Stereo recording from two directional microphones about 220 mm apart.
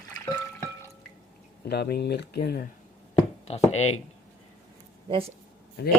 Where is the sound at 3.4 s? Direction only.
30° left (ahead or behind).